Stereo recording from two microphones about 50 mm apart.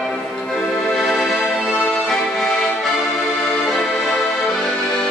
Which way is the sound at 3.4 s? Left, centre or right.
Centre.